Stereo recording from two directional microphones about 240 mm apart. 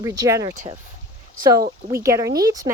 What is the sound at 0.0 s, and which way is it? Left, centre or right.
Speech, centre.